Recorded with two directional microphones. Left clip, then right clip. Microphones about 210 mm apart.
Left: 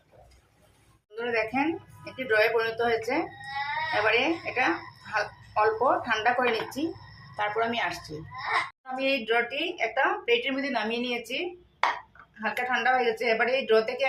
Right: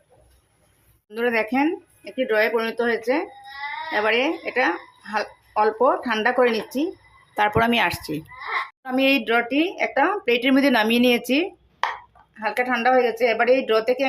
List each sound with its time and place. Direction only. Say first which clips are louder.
1.1 s speech: right 6 dB; 50° right (ahead or behind)